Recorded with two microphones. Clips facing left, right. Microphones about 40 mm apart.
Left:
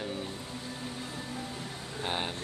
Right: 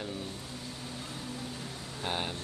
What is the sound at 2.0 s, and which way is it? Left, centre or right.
Speech, centre.